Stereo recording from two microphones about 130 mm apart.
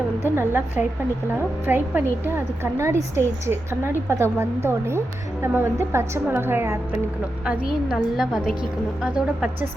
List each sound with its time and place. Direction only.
0.2 s a woman's voice: 15° right (ahead or behind)
7.7 s a woman's voice: 5° right (ahead or behind)